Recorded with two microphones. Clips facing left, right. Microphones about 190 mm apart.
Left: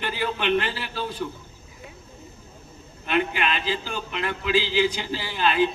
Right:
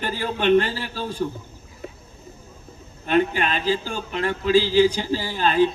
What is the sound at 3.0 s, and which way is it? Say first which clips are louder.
A man's voice: right 4 dB; 40° right (ahead or behind).